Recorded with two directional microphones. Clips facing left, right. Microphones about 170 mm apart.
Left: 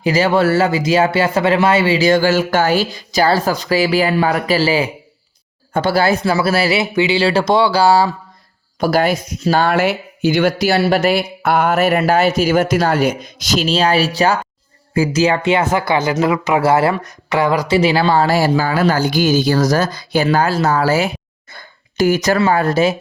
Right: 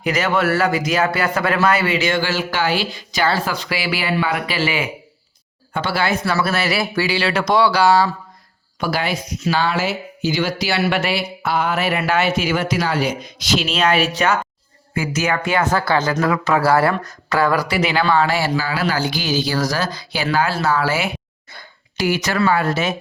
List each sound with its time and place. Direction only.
0.0 s speech: 30° left (ahead or behind)
8.8 s speech: 45° left (ahead or behind)
10.8 s speech: 35° left (ahead or behind)
21.5 s a sound: 50° left (ahead or behind)
22.5 s speech: 40° left (ahead or behind)